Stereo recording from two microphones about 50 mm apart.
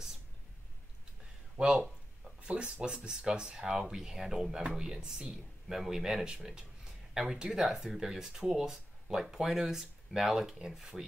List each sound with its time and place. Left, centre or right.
1.6 s speech: centre